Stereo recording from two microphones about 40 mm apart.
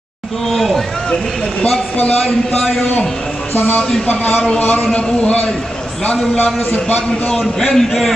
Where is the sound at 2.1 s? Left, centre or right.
Centre.